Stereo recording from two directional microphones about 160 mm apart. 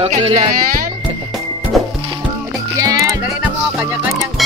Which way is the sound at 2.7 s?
20° right (ahead or behind).